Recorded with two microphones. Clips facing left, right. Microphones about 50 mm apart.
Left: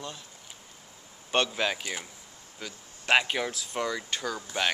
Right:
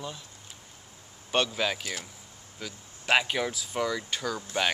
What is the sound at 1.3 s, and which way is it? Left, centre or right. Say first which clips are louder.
Speech: even; centre.